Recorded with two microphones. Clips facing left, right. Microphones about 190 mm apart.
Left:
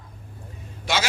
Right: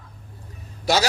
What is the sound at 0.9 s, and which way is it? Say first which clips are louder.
Speech: right 5 dB; 40° right (ahead or behind).